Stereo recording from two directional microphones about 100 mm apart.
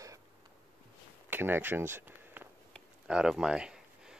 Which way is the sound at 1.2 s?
20° right (ahead or behind).